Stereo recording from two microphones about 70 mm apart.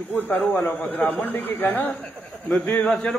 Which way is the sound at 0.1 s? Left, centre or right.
Left.